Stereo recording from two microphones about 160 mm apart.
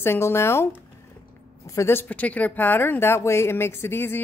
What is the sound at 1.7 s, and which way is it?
Speech, 15° left (ahead or behind).